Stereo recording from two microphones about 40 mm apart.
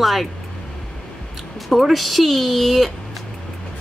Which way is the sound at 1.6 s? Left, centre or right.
Centre.